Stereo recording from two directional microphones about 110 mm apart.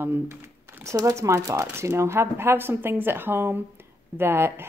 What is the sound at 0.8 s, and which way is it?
A woman's voice, 30° right (ahead or behind).